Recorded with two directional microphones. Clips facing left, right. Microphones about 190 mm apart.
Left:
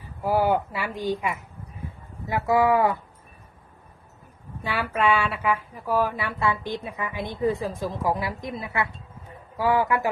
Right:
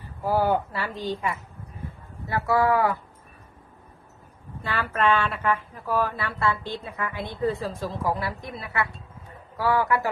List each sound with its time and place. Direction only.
0.0 s a woman's voice: 10° left (ahead or behind)
4.6 s a woman's voice: 10° left (ahead or behind)